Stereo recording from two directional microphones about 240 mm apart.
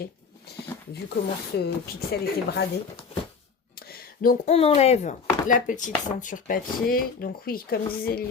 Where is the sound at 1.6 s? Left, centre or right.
Left.